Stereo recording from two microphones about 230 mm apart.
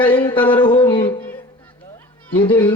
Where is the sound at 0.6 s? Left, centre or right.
Left.